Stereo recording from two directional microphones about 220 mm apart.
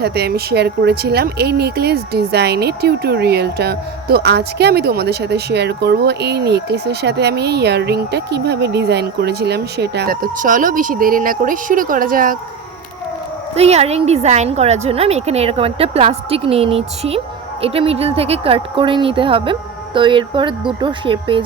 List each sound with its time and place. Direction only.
0.0 s speech: 45° right (ahead or behind)
13.6 s a woman's voice: 30° right (ahead or behind)